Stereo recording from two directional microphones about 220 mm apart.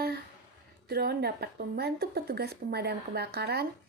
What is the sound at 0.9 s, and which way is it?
Speech, 45° right (ahead or behind).